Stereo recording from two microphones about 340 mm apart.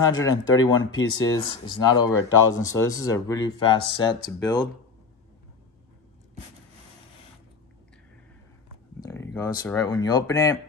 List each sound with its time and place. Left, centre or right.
0.0 s speech: centre
9.0 s speech: centre